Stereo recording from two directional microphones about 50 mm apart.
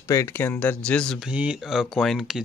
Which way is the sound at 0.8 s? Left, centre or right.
Centre.